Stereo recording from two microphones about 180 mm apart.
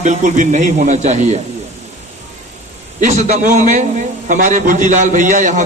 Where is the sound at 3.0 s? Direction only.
40° right (ahead or behind).